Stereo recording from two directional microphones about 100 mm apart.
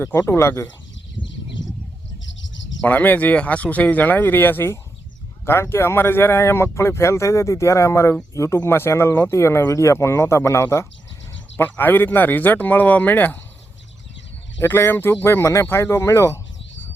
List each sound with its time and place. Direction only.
0.0 s speech: 25° left (ahead or behind)
2.8 s speech: 15° left (ahead or behind)
14.6 s speech: 25° left (ahead or behind)